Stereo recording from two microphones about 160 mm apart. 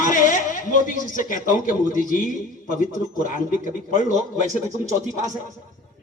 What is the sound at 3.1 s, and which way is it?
Speech, 55° left (ahead or behind).